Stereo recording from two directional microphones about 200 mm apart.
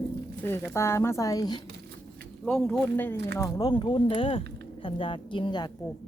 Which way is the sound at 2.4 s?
Centre (ahead or behind).